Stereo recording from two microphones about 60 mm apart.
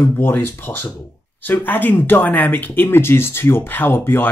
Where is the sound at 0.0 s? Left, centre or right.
Left.